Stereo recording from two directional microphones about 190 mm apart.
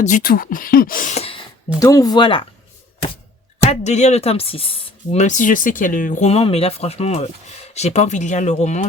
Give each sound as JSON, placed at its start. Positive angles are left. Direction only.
{"t": 0.0, "sound": "speech", "side_deg": 45}
{"t": 1.8, "sound": "speech", "side_deg": 20}
{"t": 3.6, "sound": "speech", "side_deg": 35}
{"t": 5.1, "sound": "speech", "side_deg": 40}